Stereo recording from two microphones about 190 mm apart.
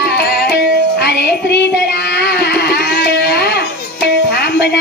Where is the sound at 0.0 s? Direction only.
60° left (ahead or behind).